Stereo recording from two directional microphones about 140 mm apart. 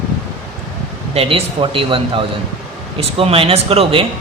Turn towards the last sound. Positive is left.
turn(degrees=-45)  # may be behind; listen again after turning